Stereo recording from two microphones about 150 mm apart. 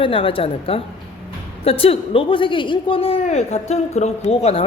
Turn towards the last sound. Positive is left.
turn(degrees=45)  # may be behind; listen again after turning